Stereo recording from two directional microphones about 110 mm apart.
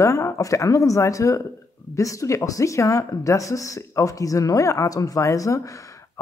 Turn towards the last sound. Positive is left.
turn(degrees=30)  # may be behind; listen again after turning